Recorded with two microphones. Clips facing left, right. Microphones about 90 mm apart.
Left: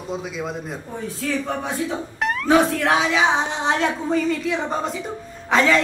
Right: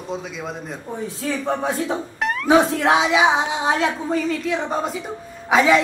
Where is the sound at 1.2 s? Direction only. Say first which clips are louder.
Right 2 dB; 20° right (ahead or behind).